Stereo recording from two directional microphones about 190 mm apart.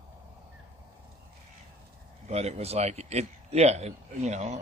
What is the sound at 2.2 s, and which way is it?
Speech, 35° right (ahead or behind).